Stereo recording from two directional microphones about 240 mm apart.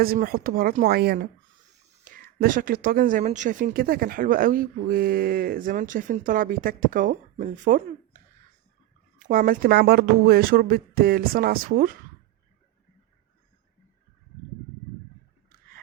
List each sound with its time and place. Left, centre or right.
0.0 s speech: right